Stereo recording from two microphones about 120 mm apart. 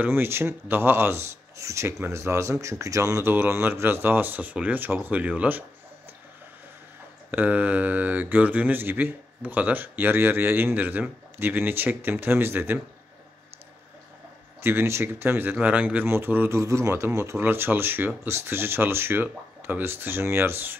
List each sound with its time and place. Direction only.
0.0 s speech: 20° right (ahead or behind)
7.2 s speech: 15° right (ahead or behind)
14.6 s speech: 20° right (ahead or behind)